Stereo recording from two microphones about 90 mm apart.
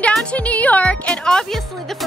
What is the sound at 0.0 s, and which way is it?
Speech, 15° left (ahead or behind).